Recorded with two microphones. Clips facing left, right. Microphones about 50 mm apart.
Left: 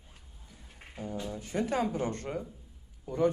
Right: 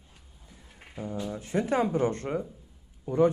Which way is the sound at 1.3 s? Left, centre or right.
Right.